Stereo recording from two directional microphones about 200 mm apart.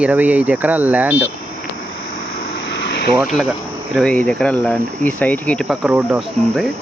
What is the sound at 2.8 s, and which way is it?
Vehicle, 60° left (ahead or behind).